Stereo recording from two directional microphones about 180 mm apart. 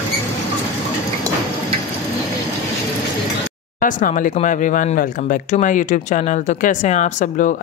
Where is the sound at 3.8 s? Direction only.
50° left (ahead or behind).